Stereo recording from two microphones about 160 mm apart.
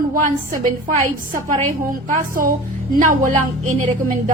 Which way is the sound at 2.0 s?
55° right (ahead or behind).